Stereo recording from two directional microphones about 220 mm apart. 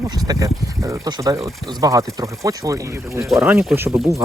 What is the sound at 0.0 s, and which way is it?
Speech, 15° right (ahead or behind).